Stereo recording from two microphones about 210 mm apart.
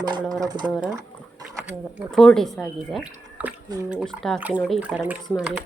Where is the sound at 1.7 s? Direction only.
Centre (ahead or behind).